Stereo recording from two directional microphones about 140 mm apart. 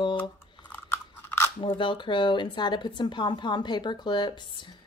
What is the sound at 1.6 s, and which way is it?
A woman's voice, 35° left (ahead or behind).